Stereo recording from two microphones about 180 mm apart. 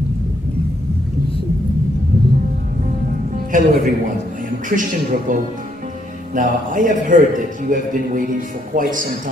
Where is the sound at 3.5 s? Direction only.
45° right (ahead or behind).